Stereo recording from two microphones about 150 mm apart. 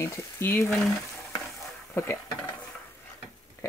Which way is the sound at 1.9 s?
15° left (ahead or behind).